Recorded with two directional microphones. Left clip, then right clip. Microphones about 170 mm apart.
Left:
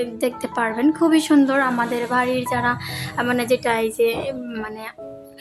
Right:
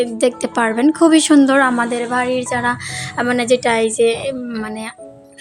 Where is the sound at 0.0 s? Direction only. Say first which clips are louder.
Right 7 dB; 30° right (ahead or behind).